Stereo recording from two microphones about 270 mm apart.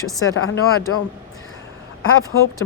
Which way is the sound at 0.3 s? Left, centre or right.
Left.